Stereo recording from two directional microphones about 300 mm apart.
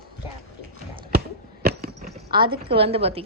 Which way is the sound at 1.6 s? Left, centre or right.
Right.